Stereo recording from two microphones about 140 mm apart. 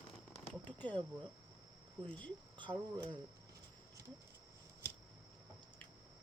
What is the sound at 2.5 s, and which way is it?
Speech, 35° right (ahead or behind).